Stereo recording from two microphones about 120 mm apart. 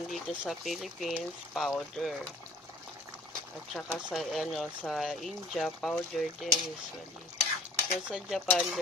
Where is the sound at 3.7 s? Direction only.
Centre (ahead or behind).